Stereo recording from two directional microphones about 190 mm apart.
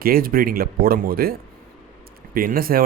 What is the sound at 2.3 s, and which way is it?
Speech, 50° right (ahead or behind).